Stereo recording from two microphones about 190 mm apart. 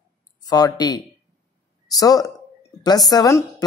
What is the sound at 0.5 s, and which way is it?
Speech, 20° left (ahead or behind).